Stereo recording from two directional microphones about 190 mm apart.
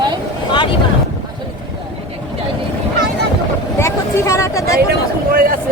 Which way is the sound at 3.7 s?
15° left (ahead or behind).